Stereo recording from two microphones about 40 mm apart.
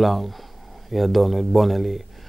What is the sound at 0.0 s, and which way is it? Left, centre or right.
Speech, centre.